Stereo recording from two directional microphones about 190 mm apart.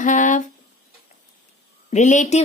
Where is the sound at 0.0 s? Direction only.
40° left (ahead or behind).